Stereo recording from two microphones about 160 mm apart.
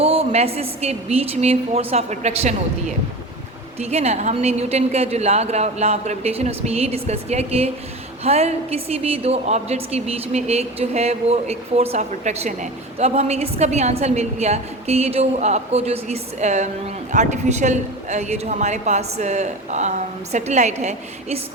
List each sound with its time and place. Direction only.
0.0 s a woman's voice: 40° right (ahead or behind)
3.8 s a woman's voice: 40° right (ahead or behind)